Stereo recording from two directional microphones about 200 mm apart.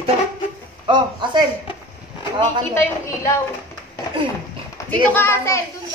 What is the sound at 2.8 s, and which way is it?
Speech, 15° left (ahead or behind).